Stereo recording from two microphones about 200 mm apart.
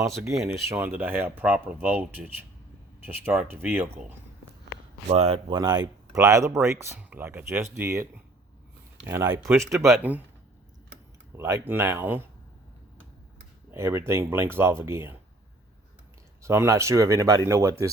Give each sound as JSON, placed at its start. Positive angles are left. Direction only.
{"t": 0.7, "sound": "speech", "side_deg": -10}
{"t": 5.0, "sound": "speech", "side_deg": -30}
{"t": 9.0, "sound": "speech", "side_deg": -10}
{"t": 9.6, "sound": "speech", "side_deg": 0}
{"t": 11.3, "sound": "speech", "side_deg": -15}
{"t": 13.7, "sound": "speech", "side_deg": -15}
{"t": 16.4, "sound": "speech", "side_deg": -15}